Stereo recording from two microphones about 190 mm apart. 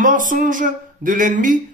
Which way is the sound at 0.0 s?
45° right (ahead or behind).